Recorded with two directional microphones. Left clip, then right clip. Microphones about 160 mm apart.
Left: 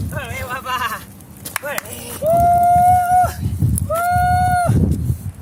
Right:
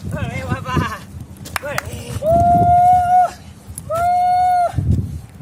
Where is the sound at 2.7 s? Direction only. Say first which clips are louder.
Right 1 dB; 20° left (ahead or behind).